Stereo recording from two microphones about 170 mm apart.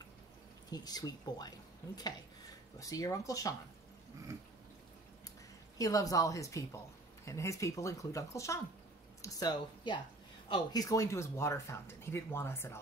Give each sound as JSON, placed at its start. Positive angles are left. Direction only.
{"t": 0.7, "sound": "speech", "side_deg": 25}
{"t": 2.8, "sound": "speech", "side_deg": 20}
{"t": 5.8, "sound": "speech", "side_deg": 20}